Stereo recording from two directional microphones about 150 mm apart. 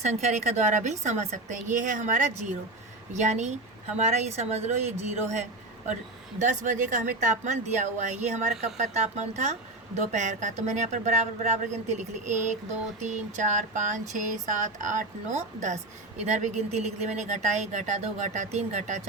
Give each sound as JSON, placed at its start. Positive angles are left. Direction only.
{"t": 0.0, "sound": "a woman's voice", "side_deg": -50}
{"t": 6.4, "sound": "a woman's voice", "side_deg": -55}